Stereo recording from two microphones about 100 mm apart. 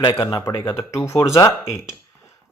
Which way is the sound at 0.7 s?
30° left (ahead or behind).